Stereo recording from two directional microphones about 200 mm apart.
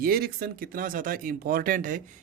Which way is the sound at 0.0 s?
50° right (ahead or behind).